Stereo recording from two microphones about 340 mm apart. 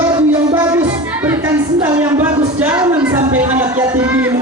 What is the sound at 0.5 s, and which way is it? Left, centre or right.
Music, centre.